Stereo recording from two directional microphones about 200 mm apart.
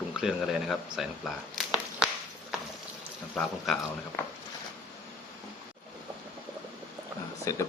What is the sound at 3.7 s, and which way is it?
Speech, centre (ahead or behind).